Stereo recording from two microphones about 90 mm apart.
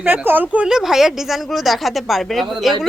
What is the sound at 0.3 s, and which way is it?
A woman's voice, 20° right (ahead or behind).